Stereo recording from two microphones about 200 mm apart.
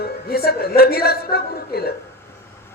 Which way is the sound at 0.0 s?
50° left (ahead or behind).